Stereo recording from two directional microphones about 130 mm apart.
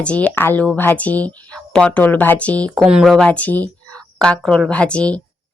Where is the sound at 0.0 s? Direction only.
10° left (ahead or behind).